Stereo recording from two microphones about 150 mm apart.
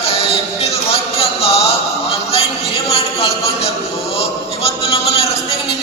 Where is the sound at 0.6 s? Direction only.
40° left (ahead or behind).